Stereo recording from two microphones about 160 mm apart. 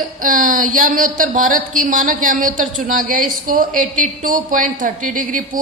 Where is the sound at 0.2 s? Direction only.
55° right (ahead or behind).